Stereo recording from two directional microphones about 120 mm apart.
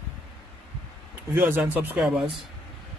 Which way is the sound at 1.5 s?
15° right (ahead or behind).